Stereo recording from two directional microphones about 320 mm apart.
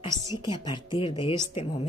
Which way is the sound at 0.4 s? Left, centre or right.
Centre.